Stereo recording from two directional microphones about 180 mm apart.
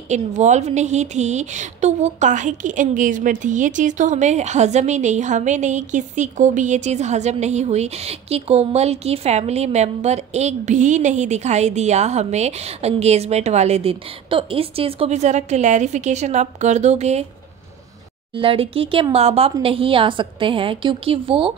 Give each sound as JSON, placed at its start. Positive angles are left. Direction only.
{"t": 0.1, "sound": "a woman's voice", "side_deg": -40}
{"t": 18.3, "sound": "a woman's voice", "side_deg": -30}